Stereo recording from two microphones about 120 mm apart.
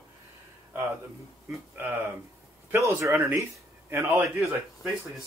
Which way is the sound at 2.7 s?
25° right (ahead or behind).